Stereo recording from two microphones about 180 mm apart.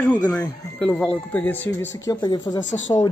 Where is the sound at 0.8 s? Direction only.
10° left (ahead or behind).